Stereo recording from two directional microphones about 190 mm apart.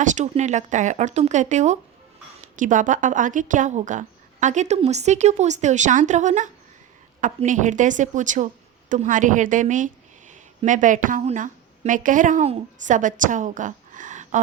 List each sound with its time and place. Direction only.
0.0 s a woman's voice: 40° right (ahead or behind)